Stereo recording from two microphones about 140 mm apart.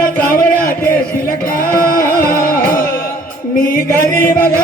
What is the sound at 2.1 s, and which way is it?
Music, 80° left.